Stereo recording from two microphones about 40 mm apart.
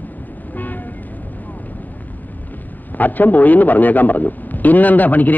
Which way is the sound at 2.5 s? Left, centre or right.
Left.